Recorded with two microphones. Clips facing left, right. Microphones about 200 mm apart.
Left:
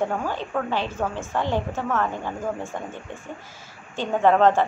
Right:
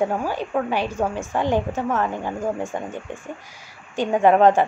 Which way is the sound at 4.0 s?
15° right (ahead or behind).